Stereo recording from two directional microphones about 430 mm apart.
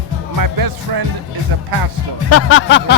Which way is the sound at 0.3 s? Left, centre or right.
Right.